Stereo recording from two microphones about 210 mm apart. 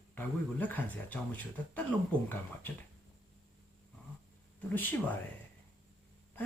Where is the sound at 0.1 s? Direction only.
10° left (ahead or behind).